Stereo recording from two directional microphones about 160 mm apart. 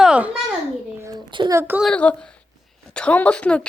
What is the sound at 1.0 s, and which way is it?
Speech, 25° right (ahead or behind).